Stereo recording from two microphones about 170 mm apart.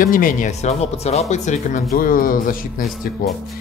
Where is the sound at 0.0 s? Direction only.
55° left (ahead or behind).